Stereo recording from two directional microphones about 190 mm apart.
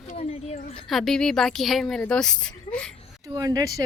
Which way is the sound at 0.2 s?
30° left (ahead or behind).